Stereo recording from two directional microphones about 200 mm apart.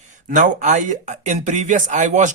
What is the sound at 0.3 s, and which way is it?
Speech, 40° right (ahead or behind).